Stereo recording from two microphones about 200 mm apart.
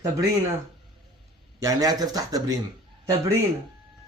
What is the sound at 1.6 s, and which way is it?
Speech, 15° right (ahead or behind).